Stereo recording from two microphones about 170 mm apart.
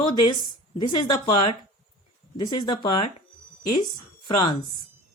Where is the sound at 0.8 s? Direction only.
25° left (ahead or behind).